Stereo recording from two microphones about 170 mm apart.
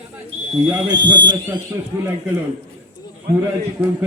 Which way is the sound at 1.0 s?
90° right.